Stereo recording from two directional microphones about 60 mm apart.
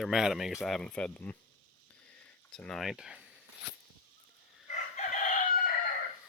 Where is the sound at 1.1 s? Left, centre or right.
Left.